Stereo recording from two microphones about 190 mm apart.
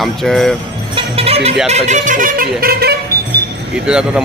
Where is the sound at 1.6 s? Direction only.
35° right (ahead or behind); by 2.9 s 55° right (ahead or behind).